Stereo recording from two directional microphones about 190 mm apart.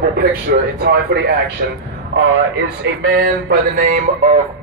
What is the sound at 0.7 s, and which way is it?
Speech, 55° right (ahead or behind).